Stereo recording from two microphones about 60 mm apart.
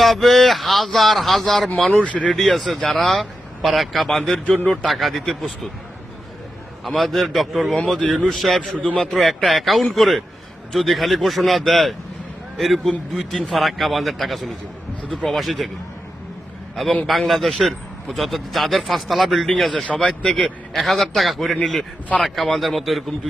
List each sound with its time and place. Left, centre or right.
0.0 s speech: centre
2.0 s a man's voice: left
2.3 s speech: centre
4.4 s a man's voice: left
4.7 s speech: centre
6.8 s speech: centre
17.1 s speech: centre
19.9 s speech: centre